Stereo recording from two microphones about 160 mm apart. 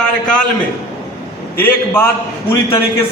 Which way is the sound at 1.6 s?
15° left (ahead or behind).